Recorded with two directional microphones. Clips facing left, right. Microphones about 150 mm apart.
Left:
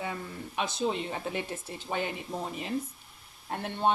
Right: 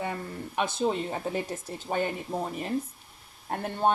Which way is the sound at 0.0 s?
55° right (ahead or behind).